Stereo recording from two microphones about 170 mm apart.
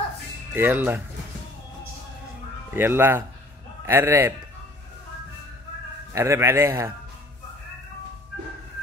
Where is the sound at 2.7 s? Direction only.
15° right (ahead or behind).